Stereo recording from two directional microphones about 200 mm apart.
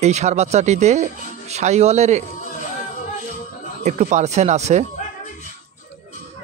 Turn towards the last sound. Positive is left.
turn(degrees=-35)  # may be behind; listen again after turning